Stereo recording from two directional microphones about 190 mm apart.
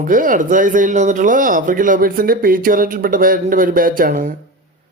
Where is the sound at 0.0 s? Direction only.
45° right (ahead or behind).